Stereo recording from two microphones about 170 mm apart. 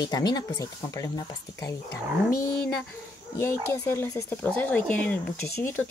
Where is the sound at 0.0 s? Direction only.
25° left (ahead or behind).